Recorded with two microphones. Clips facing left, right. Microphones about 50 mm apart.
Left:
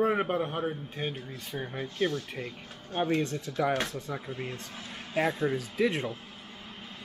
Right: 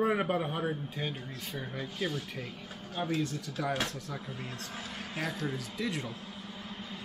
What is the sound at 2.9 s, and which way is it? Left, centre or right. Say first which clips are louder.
Speech: left 5 dB; left.